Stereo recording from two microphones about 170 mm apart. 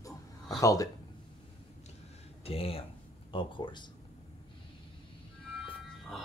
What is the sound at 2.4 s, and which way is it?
Speech, 35° left (ahead or behind).